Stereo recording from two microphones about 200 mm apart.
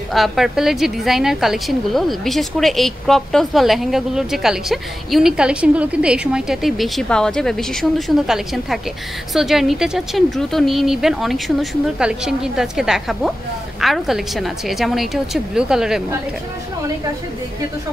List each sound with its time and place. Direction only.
0.1 s a woman's voice: centre (ahead or behind)
9.3 s a woman's voice: centre (ahead or behind)